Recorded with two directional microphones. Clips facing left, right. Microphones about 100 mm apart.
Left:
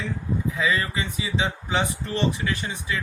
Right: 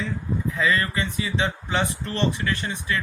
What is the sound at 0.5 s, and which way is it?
Speech, 15° left (ahead or behind).